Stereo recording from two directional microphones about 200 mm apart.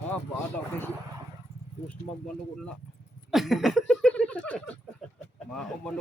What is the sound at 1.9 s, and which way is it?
Speech, 5° left (ahead or behind).